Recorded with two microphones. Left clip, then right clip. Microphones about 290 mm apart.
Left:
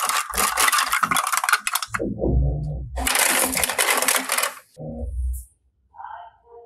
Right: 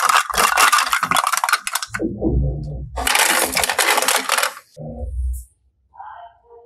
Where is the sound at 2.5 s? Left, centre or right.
Centre.